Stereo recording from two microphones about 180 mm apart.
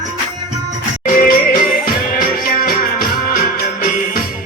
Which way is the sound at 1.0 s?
55° left (ahead or behind).